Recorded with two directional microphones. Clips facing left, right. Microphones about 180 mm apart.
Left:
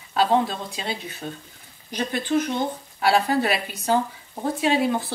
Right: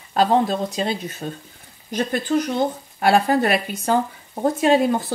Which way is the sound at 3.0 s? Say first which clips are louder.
Right 3 dB; 50° right (ahead or behind).